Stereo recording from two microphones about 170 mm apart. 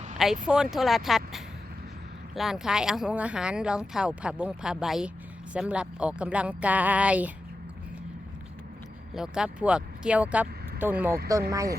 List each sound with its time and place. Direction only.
0.4 s speech: 5° right (ahead or behind)
9.1 s speech: 5° right (ahead or behind)
11.3 s speech: 20° right (ahead or behind)